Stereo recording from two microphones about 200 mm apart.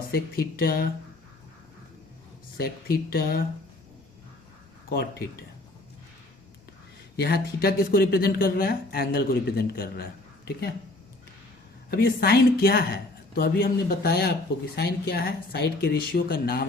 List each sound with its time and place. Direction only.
0.1 s speech: 50° left (ahead or behind)
2.6 s speech: 50° left (ahead or behind)
7.2 s speech: 50° left (ahead or behind)
11.9 s speech: 50° left (ahead or behind)